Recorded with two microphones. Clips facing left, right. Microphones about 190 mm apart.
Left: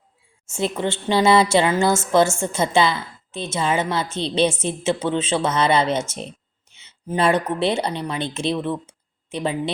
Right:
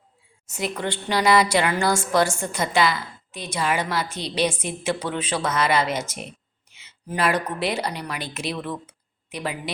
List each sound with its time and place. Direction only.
0.4 s a woman's voice: 25° left (ahead or behind)